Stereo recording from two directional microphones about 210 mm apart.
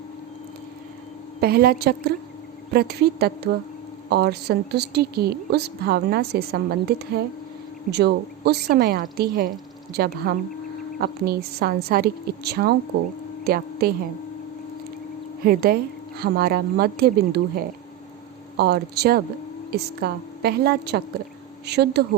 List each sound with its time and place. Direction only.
1.4 s a woman's voice: 45° right (ahead or behind)
15.4 s a woman's voice: 45° right (ahead or behind)